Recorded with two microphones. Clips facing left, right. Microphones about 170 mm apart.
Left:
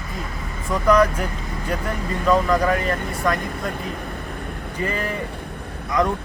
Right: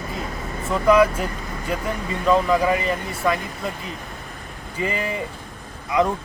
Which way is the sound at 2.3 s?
5° right (ahead or behind).